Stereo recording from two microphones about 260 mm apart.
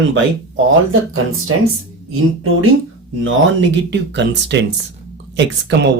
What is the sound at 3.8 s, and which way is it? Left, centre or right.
Speech, right.